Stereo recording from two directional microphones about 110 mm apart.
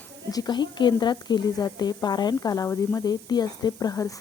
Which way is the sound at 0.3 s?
35° left (ahead or behind).